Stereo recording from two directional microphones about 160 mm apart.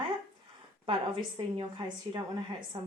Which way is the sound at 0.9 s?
35° right (ahead or behind).